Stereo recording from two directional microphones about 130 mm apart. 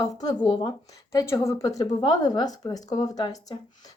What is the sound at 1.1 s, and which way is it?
Speech, 25° left (ahead or behind).